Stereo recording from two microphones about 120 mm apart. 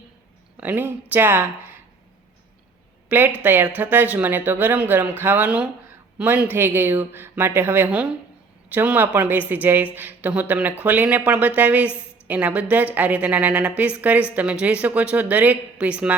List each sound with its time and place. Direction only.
0.5 s speech: 15° right (ahead or behind)
3.1 s speech: 15° right (ahead or behind)